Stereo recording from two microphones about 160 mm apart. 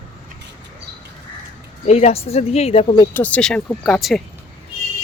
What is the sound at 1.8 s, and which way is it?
Speech, 40° left (ahead or behind).